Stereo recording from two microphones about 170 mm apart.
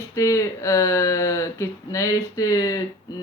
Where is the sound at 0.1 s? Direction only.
20° left (ahead or behind).